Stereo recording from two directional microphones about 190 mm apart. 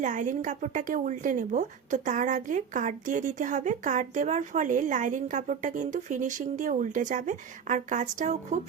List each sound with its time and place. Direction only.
0.0 s a woman's voice: 40° right (ahead or behind)